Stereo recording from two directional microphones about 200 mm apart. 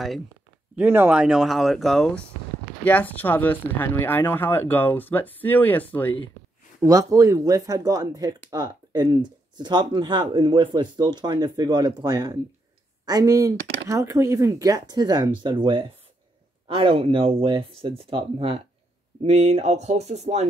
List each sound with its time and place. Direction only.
0.7 s speech: 10° right (ahead or behind); by 6.1 s 10° left (ahead or behind)
6.8 s speech: 15° right (ahead or behind); by 20.4 s 35° right (ahead or behind)